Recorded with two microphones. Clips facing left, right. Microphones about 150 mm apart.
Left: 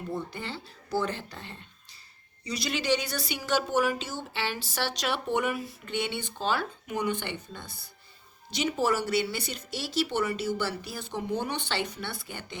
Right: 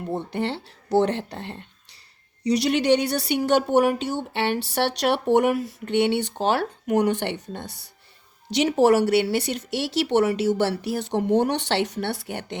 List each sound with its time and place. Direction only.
0.2 s speech: 75° right (ahead or behind)